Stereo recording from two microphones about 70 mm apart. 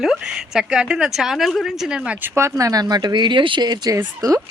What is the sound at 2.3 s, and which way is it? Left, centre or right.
Speech, right.